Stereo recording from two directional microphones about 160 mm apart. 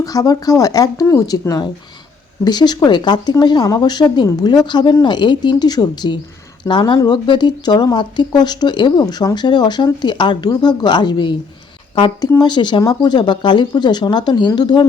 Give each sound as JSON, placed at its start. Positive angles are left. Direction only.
{"t": 0.0, "sound": "speech", "side_deg": 20}